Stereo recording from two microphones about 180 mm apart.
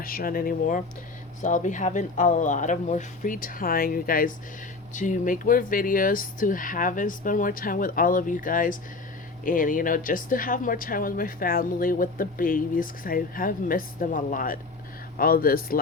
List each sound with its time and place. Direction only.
0.0 s speech: 55° left (ahead or behind)